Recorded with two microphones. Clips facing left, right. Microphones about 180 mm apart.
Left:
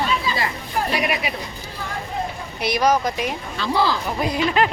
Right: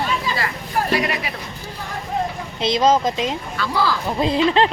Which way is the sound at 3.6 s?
20° left (ahead or behind).